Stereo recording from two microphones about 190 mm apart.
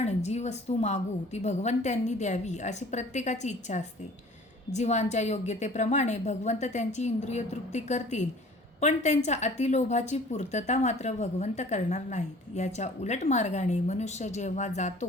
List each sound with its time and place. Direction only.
0.0 s a woman's voice: 35° left (ahead or behind)